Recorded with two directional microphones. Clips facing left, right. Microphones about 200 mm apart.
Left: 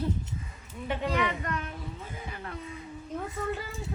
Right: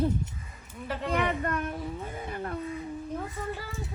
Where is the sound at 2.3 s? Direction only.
45° right (ahead or behind).